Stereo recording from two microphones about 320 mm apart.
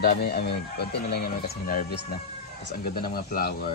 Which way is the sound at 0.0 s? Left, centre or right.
Left.